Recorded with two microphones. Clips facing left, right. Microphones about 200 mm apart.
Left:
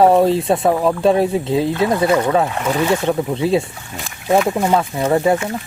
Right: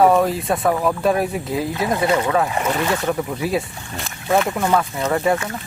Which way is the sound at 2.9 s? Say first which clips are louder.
Left 4 dB; 25° left (ahead or behind).